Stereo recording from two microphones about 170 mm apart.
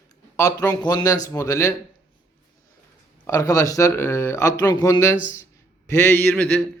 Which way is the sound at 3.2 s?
20° left (ahead or behind).